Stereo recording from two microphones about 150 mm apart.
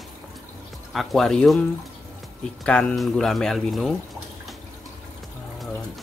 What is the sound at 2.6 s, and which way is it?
Speech, 5° left (ahead or behind).